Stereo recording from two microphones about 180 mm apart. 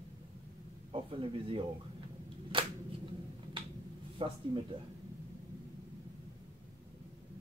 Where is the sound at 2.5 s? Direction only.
30° right (ahead or behind).